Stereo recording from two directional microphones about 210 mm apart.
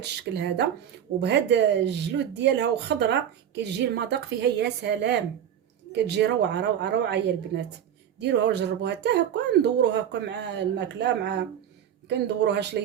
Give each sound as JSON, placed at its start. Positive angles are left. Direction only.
{"t": 0.0, "sound": "speech", "side_deg": -50}